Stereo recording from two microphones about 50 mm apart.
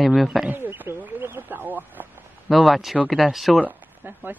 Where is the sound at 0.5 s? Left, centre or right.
Right.